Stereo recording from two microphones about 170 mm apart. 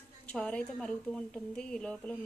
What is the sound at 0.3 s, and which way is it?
Speech, 5° left (ahead or behind).